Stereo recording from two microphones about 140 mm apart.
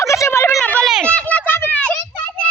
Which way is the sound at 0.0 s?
20° left (ahead or behind).